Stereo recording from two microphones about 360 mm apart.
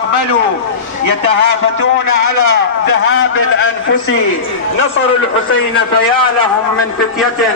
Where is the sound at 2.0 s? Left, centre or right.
Left.